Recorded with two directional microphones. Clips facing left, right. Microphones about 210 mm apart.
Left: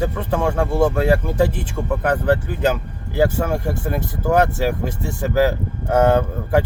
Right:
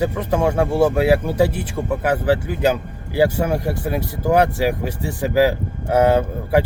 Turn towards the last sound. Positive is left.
turn(degrees=-10)  # may be behind; listen again after turning